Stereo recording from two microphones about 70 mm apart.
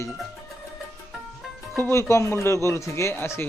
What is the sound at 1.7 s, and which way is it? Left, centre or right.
A man's voice, left.